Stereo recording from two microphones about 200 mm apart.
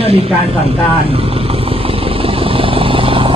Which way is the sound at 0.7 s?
30° right (ahead or behind).